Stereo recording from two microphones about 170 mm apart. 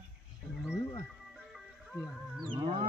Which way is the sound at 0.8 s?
15° left (ahead or behind).